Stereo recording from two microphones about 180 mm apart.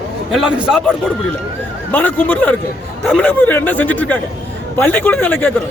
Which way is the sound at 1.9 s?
10° left (ahead or behind).